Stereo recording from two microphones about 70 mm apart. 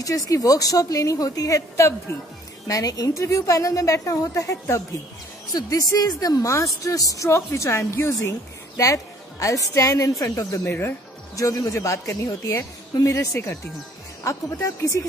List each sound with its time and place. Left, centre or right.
0.0 s a woman's voice: left
2.1 s a woman's voice: left
2.7 s a woman's voice: left
5.5 s a woman's voice: left
7.2 s a woman's voice: left
10.6 s a woman's voice: left
11.3 s a woman's voice: left